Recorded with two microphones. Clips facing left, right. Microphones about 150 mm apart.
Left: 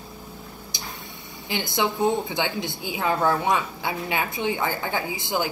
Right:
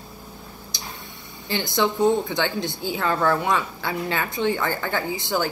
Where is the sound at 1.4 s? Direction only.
20° left (ahead or behind).